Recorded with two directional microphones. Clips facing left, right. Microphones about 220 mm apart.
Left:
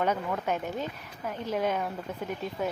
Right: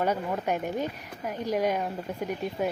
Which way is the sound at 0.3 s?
20° right (ahead or behind).